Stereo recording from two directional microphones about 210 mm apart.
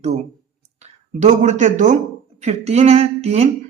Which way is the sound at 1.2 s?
35° right (ahead or behind).